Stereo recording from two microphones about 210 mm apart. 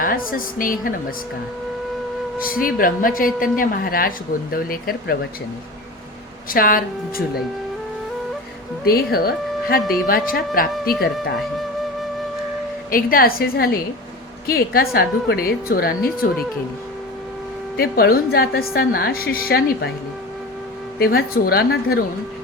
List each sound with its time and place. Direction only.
0.0 s a woman's voice: 40° left (ahead or behind)
2.5 s a woman's voice: 40° left (ahead or behind)
6.5 s a woman's voice: 40° left (ahead or behind)
8.8 s a woman's voice: 45° left (ahead or behind)
12.9 s a woman's voice: 45° left (ahead or behind)
17.7 s a woman's voice: 45° left (ahead or behind)
21.0 s a woman's voice: 45° left (ahead or behind)